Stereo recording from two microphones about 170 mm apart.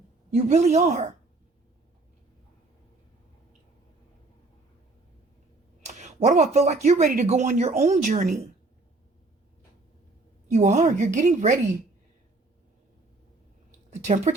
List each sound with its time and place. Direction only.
0.3 s speech: 40° right (ahead or behind)
5.8 s speech: 40° right (ahead or behind)
10.5 s speech: 45° right (ahead or behind)
13.9 s speech: 40° right (ahead or behind)